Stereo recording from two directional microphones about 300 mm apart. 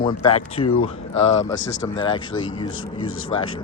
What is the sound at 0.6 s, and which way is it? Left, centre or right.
Speech, left.